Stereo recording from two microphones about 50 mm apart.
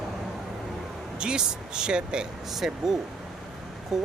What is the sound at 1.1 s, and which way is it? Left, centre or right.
Speech, centre.